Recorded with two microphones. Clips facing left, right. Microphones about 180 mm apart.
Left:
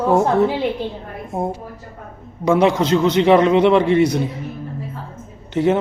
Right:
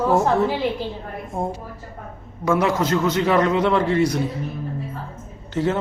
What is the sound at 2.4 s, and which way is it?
A man's voice, 15° left (ahead or behind).